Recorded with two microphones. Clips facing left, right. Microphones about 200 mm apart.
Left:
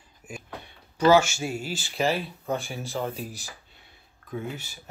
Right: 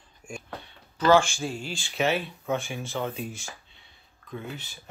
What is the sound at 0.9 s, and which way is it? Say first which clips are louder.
Speech: left 1 dB; 10° left (ahead or behind).